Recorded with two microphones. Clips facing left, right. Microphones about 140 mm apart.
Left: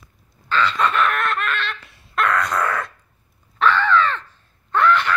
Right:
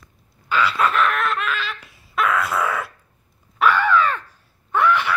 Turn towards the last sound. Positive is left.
turn(degrees=-10)  # may be behind; listen again after turning